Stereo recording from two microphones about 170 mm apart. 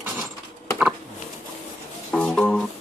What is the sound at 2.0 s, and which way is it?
Music, 5° left (ahead or behind).